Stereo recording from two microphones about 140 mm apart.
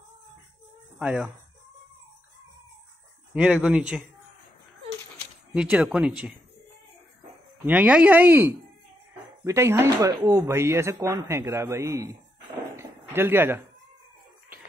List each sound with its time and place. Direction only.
0.9 s speech: 5° right (ahead or behind)
3.3 s speech: 10° right (ahead or behind)
5.5 s speech: 5° right (ahead or behind)
7.6 s a man's voice: 10° right (ahead or behind)
12.7 s a sound: 15° right (ahead or behind)